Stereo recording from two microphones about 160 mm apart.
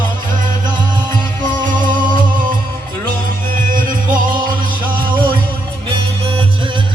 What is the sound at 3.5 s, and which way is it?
Music, 60° right (ahead or behind).